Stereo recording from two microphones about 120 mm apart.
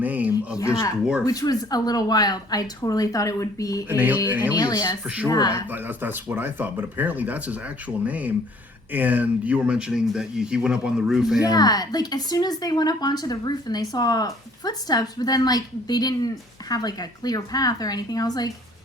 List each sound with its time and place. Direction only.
0.0 s speech: 15° right (ahead or behind)
0.5 s a woman's voice: 25° left (ahead or behind)
3.8 s speech: 15° right (ahead or behind)
4.5 s a woman's voice: 35° left (ahead or behind)
5.0 s speech: 10° right (ahead or behind)
5.3 s a woman's voice: 30° left (ahead or behind)
5.7 s speech: 15° right (ahead or behind)
11.4 s a woman's voice: 35° left (ahead or behind)